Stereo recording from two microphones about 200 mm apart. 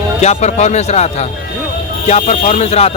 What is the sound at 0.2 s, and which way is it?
Speech, 35° left (ahead or behind).